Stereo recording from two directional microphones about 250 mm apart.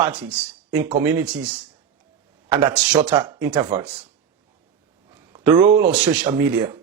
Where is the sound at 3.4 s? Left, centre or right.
Centre.